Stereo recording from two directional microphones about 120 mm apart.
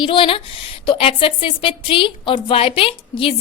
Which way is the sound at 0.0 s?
45° left (ahead or behind).